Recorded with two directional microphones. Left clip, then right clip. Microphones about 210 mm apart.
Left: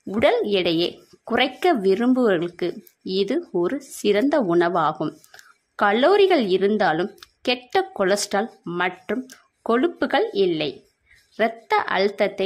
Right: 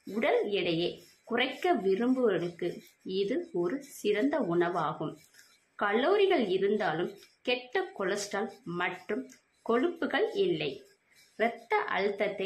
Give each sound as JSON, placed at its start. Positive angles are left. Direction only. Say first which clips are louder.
{"t": 0.1, "sound": "speech", "louder": "left 9 dB", "side_deg": 50}